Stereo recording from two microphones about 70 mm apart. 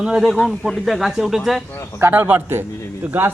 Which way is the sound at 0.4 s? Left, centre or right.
Centre.